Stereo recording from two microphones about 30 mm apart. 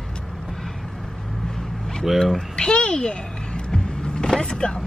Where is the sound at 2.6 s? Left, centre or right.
Left.